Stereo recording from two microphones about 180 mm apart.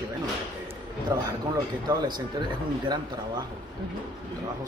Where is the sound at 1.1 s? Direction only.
20° right (ahead or behind).